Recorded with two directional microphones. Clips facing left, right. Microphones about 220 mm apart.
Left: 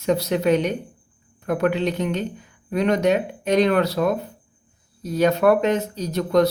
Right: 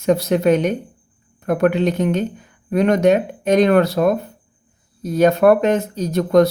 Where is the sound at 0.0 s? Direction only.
50° right (ahead or behind).